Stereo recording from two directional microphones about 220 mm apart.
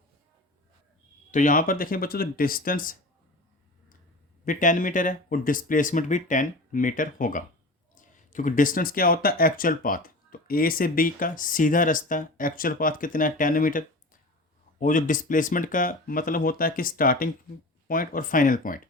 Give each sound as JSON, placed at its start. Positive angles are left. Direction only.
{"t": 1.3, "sound": "speech", "side_deg": 35}
{"t": 4.4, "sound": "speech", "side_deg": 35}